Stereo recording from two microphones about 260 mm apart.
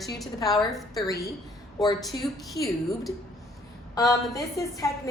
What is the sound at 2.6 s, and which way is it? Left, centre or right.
Speech, centre.